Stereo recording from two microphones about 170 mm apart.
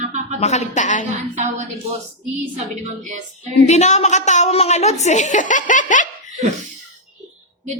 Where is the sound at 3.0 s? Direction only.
45° right (ahead or behind).